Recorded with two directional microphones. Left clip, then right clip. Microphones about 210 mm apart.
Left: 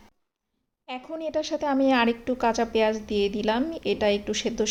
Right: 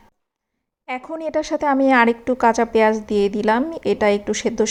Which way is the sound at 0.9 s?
20° right (ahead or behind).